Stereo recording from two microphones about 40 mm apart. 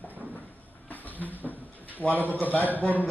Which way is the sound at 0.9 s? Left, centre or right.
Left.